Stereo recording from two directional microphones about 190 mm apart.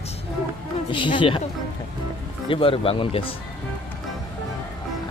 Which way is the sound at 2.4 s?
30° left (ahead or behind).